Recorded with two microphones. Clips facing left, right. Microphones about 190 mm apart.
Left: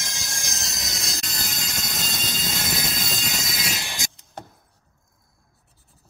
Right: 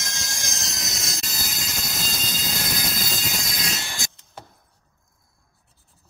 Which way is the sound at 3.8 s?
15° left (ahead or behind).